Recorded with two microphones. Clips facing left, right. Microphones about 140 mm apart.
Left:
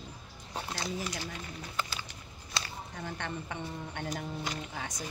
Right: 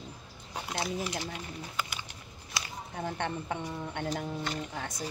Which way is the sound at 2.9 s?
50° right (ahead or behind).